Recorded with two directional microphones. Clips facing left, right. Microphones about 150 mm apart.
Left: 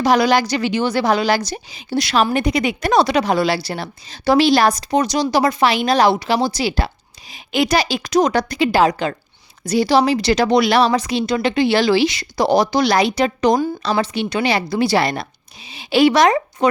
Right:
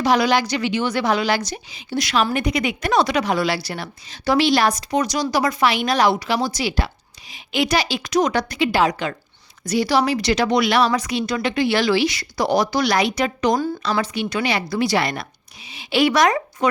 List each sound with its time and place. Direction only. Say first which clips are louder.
0.0 s a woman's voice: left 3 dB; 40° left (ahead or behind)